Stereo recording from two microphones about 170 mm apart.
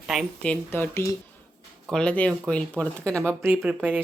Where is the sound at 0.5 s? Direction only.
10° left (ahead or behind).